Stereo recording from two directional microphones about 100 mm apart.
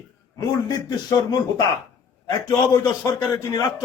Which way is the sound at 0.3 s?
45° left (ahead or behind).